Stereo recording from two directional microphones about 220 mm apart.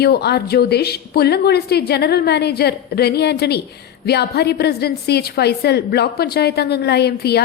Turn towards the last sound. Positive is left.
turn(degrees=45)  # may be behind; listen again after turning